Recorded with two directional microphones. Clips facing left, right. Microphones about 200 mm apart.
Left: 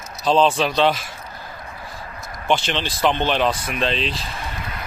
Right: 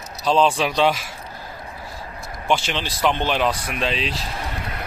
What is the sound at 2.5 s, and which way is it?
Speech, 10° right (ahead or behind).